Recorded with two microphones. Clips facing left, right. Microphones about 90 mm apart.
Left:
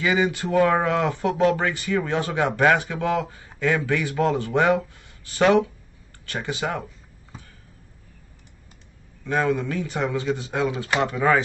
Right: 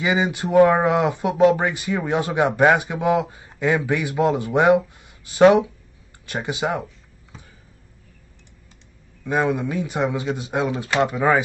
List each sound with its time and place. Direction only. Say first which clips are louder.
0.0 s speech: right 1 dB; 20° right (ahead or behind)
9.2 s speech: right 1 dB; 15° right (ahead or behind)